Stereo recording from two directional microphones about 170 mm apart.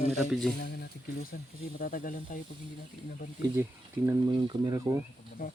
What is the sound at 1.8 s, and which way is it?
Speech, 55° left (ahead or behind).